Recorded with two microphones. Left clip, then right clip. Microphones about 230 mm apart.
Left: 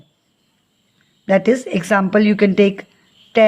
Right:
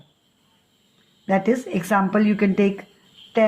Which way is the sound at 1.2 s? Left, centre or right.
Left.